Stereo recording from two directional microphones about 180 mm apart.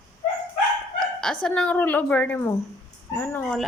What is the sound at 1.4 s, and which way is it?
A woman's voice, 5° left (ahead or behind).